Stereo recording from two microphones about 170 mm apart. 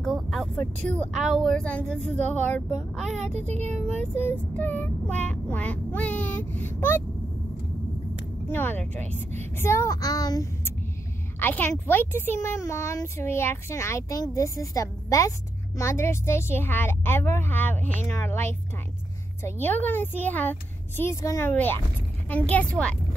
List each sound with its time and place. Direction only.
0.0 s speech: centre (ahead or behind)
3.3 s speech: 40° right (ahead or behind)
4.1 s speech: 10° left (ahead or behind)
8.5 s a woman's voice: 10° left (ahead or behind)